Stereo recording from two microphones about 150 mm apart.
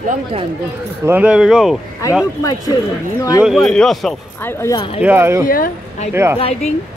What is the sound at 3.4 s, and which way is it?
Speech, centre (ahead or behind).